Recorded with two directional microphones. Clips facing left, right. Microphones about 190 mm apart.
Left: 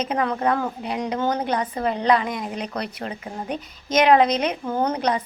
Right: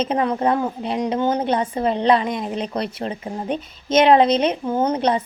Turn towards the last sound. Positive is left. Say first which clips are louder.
# right 3 dB
turn(degrees=-25)  # may be behind; listen again after turning